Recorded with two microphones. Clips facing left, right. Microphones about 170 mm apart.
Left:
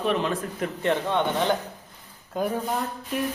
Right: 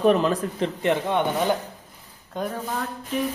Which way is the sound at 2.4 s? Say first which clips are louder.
Left 2 dB; 5° left (ahead or behind).